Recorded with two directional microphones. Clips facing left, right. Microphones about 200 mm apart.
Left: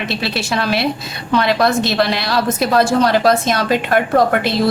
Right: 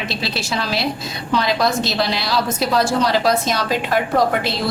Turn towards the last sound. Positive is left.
turn(degrees=55)  # may be behind; listen again after turning